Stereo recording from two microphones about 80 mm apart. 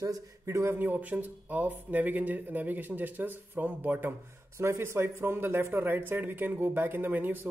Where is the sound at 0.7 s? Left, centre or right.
Right.